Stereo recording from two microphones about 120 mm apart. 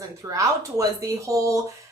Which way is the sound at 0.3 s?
30° right (ahead or behind).